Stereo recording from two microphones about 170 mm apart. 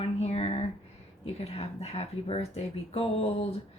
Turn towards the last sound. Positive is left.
turn(degrees=35)  # may be behind; listen again after turning